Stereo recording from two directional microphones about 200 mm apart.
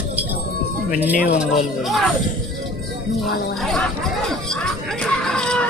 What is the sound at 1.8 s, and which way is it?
Speech, centre (ahead or behind).